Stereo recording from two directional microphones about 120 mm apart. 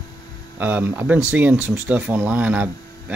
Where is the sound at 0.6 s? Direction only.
15° right (ahead or behind).